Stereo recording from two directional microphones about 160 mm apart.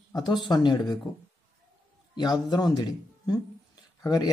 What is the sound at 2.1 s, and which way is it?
Speech, 25° left (ahead or behind).